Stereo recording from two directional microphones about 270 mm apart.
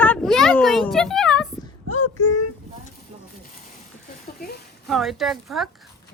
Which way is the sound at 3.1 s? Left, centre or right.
Right.